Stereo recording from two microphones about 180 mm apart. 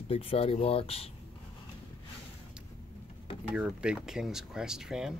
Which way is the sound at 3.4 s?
5° right (ahead or behind).